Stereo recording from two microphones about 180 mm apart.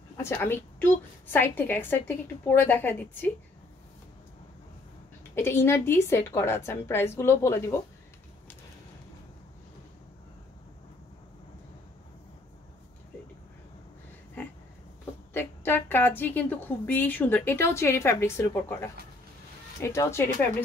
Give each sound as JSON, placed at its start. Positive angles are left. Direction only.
{"t": 0.2, "sound": "a woman's voice", "side_deg": 15}
{"t": 5.3, "sound": "a woman's voice", "side_deg": 15}
{"t": 15.3, "sound": "a woman's voice", "side_deg": 10}